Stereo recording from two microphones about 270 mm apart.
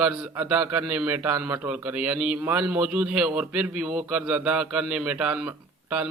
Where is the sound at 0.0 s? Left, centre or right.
Centre.